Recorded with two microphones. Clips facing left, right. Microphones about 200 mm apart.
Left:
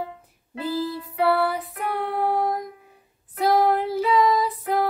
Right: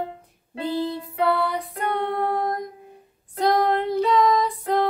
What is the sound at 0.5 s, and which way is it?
Music, 25° right (ahead or behind).